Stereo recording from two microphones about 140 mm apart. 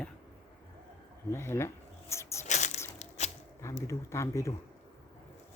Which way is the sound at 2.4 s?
55° left (ahead or behind).